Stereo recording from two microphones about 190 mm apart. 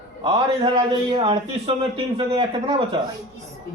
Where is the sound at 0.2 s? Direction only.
25° right (ahead or behind).